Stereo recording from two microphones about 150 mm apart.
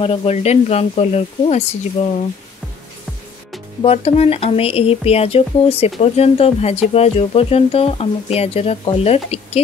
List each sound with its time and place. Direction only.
0.0 s speech: 40° left (ahead or behind)
3.8 s speech: 40° left (ahead or behind)